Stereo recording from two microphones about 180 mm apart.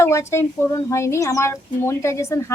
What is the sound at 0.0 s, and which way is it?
Speech, 15° left (ahead or behind).